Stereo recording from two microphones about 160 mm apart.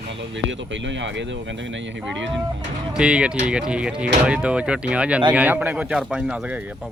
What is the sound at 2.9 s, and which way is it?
Speech, 5° right (ahead or behind).